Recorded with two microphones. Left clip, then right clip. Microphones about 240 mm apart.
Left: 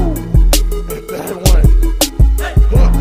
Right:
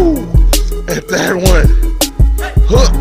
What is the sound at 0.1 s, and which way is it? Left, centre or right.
Music, centre.